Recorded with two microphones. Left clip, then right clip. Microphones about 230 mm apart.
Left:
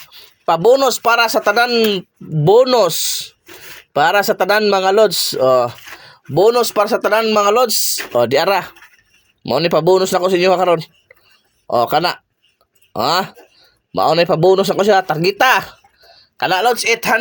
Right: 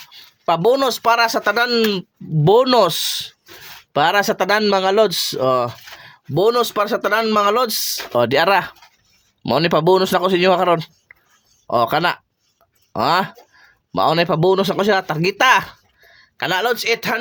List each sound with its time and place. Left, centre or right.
0.1 s a man's voice: right